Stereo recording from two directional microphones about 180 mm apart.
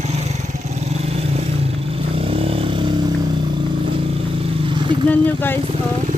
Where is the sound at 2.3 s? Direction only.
30° right (ahead or behind).